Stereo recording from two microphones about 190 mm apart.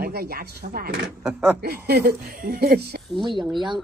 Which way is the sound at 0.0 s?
55° right (ahead or behind).